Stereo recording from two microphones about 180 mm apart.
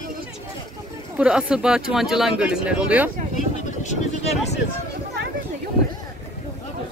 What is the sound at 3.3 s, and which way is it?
Vehicle, 40° left (ahead or behind).